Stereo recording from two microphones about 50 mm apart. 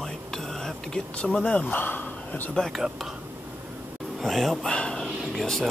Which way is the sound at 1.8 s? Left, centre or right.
Left.